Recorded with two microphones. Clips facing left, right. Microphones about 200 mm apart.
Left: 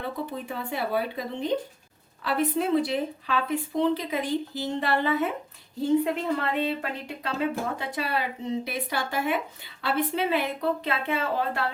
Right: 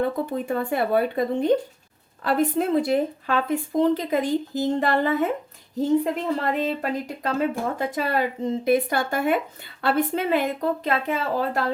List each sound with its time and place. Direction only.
0.0 s a woman's voice: 50° right (ahead or behind)